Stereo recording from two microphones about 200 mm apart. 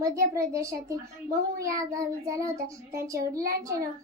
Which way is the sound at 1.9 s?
15° right (ahead or behind).